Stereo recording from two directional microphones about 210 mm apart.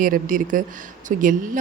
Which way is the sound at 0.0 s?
40° right (ahead or behind).